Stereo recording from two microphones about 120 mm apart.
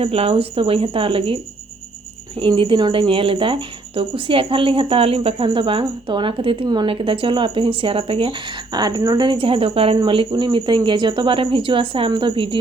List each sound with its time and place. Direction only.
0.0 s a woman's voice: 55° right (ahead or behind)
2.4 s a woman's voice: 45° right (ahead or behind)
10.0 s a woman's voice: 40° right (ahead or behind)